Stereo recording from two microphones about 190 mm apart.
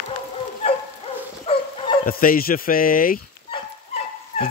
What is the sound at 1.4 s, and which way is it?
Dog, 30° left (ahead or behind).